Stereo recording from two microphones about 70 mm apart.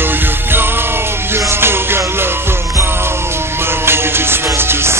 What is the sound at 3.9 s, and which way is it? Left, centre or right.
Music, right.